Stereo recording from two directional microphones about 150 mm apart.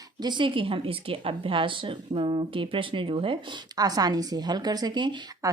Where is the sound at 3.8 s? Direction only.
25° right (ahead or behind).